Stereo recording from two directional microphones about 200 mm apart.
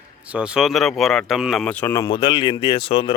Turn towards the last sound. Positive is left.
turn(degrees=25)  # may be behind; listen again after turning